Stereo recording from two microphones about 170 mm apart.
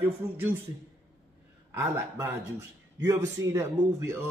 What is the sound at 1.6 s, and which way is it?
Speech, 15° right (ahead or behind).